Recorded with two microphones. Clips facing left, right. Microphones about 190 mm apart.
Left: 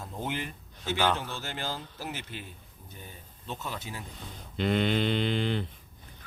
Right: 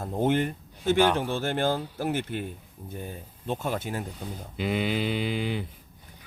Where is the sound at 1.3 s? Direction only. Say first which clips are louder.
Right 10 dB; 55° right (ahead or behind).